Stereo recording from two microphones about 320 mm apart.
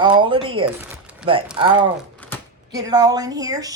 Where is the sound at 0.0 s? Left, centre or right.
Centre.